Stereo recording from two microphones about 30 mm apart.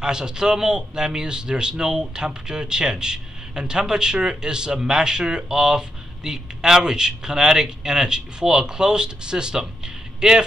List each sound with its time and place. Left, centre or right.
0.0 s speech: right